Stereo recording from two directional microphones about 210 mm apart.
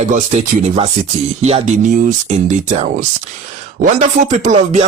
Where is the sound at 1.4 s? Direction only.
30° right (ahead or behind).